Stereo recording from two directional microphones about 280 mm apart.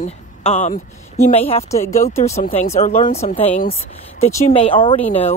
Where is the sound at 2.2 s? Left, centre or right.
Left.